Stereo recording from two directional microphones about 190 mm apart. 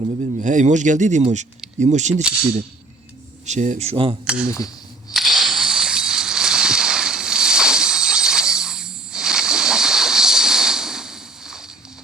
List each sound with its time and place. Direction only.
0.2 s speech: 40° right (ahead or behind)
3.4 s speech: 40° right (ahead or behind)
4.4 s speech: 15° left (ahead or behind)
5.1 s a sound: centre (ahead or behind)